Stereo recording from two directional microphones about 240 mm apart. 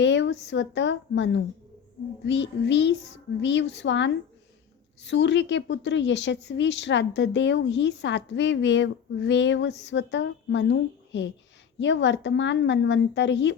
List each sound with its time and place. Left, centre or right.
0.0 s a woman's voice: left